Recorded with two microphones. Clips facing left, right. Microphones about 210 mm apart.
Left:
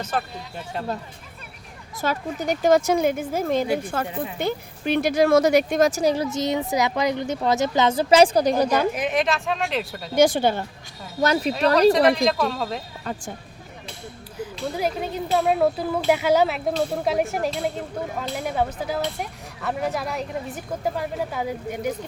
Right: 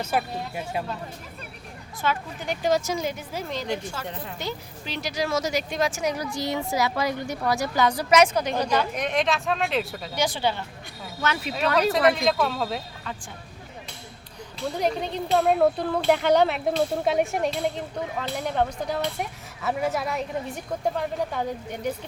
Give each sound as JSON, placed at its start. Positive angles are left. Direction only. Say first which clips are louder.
{"t": 0.0, "sound": "speech", "louder": "right 1 dB", "side_deg": -10}
{"t": 2.0, "sound": "a woman's voice", "louder": "left 3 dB", "side_deg": 40}
{"t": 6.3, "sound": "a woman's voice", "louder": "left 4 dB", "side_deg": 20}
{"t": 9.0, "sound": "speech", "louder": "left 2 dB", "side_deg": 5}
{"t": 10.2, "sound": "a woman's voice", "louder": "left 8 dB", "side_deg": 50}
{"t": 11.2, "sound": "speech", "louder": "left 8 dB", "side_deg": 35}
{"t": 11.8, "sound": "speech", "louder": "left 4 dB", "side_deg": 0}
{"t": 13.1, "sound": "a woman's voice", "louder": "left 7 dB", "side_deg": 45}
{"t": 14.3, "sound": "speech", "louder": "left 2 dB", "side_deg": 5}